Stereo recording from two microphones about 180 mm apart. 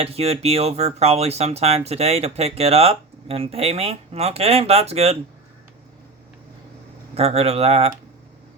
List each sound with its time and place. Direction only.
0.0 s speech: 35° right (ahead or behind)
7.2 s speech: 35° right (ahead or behind)